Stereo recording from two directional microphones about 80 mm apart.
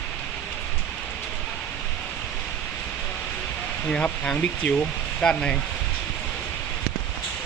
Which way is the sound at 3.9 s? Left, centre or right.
Centre.